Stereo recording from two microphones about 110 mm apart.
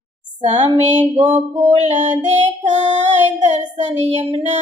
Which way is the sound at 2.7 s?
90° right.